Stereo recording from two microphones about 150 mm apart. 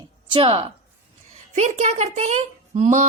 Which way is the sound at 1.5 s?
50° right (ahead or behind).